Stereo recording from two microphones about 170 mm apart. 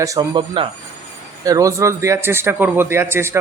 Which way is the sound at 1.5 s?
20° right (ahead or behind).